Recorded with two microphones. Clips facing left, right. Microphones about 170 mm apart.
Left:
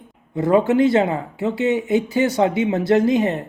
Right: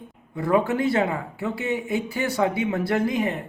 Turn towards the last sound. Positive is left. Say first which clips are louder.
# left 7 dB
turn(degrees=25)  # may be behind; listen again after turning